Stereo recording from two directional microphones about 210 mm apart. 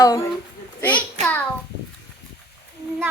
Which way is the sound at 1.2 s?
5° left (ahead or behind).